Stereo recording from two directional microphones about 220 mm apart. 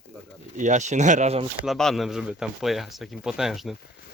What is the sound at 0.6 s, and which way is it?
Speech, 35° right (ahead or behind).